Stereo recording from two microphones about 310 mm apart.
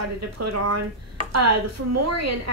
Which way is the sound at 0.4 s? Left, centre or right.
Right.